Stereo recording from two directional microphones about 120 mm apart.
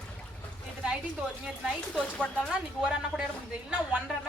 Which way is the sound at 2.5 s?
5° right (ahead or behind).